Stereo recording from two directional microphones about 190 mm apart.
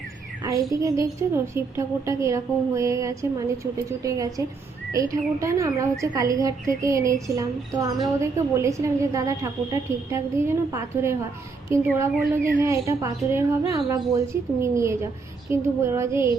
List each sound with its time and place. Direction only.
0.7 s a woman's voice: 15° right (ahead or behind)